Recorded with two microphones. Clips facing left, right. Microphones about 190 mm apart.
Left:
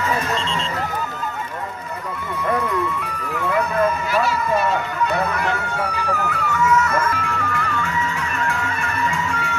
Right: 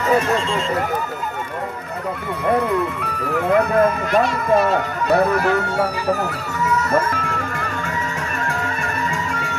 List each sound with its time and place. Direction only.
3.3 s speech: 50° right (ahead or behind)
8.5 s music: 40° right (ahead or behind)